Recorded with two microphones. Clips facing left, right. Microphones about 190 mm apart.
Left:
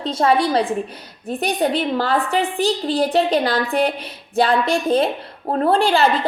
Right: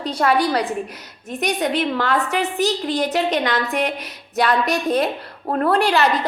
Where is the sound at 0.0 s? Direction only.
25° left (ahead or behind).